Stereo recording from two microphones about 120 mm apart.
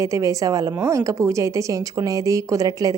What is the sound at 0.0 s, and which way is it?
A woman's voice, 25° right (ahead or behind).